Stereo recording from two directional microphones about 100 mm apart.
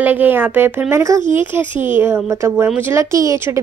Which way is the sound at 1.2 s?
50° left (ahead or behind).